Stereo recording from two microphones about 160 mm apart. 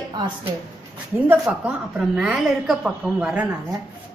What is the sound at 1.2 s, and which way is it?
A woman's voice, 5° right (ahead or behind).